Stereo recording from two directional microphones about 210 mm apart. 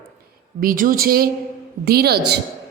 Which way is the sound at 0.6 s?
40° right (ahead or behind).